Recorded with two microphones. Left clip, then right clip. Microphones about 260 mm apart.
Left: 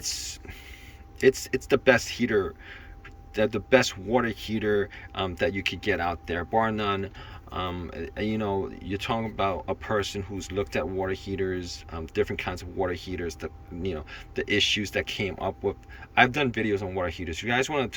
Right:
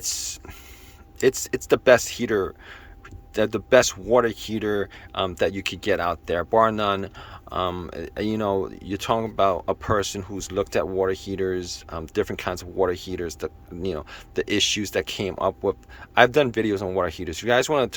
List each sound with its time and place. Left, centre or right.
0.0 s hiss: centre
1.2 s speech: centre